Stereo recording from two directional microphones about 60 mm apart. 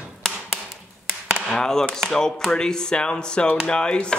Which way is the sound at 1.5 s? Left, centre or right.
Centre.